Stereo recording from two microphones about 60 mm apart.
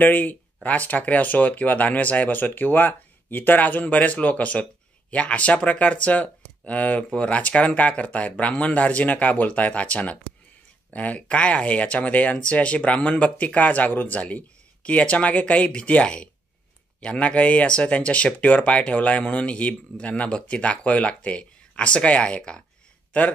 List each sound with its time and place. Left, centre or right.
0.0 s speech: left